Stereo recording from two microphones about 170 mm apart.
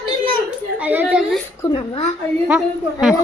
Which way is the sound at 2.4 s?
5° right (ahead or behind).